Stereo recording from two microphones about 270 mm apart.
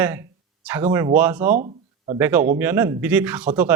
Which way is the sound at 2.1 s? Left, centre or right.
Centre.